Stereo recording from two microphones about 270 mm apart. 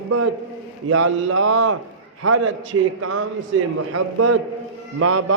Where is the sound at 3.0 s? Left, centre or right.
Right.